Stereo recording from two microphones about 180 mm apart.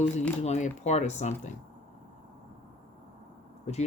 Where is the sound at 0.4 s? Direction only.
40° left (ahead or behind).